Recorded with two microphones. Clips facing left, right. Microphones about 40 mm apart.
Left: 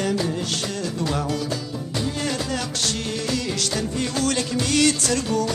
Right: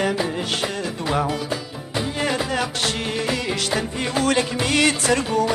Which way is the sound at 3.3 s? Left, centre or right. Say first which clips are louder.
Right 1 dB; right.